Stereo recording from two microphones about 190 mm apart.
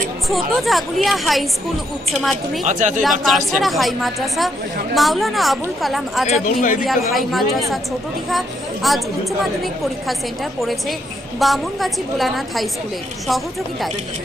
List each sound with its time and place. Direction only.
0.3 s a woman's voice: centre (ahead or behind)
2.6 s speech: 40° right (ahead or behind)
3.0 s a woman's voice: centre (ahead or behind)
6.4 s speech: 45° left (ahead or behind)
7.1 s a woman's voice: centre (ahead or behind)